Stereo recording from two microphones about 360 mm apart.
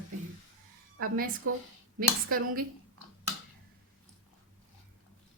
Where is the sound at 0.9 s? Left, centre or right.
Right.